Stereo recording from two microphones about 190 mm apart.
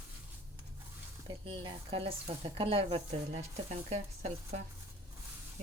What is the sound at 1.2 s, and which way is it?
Speech, 30° right (ahead or behind).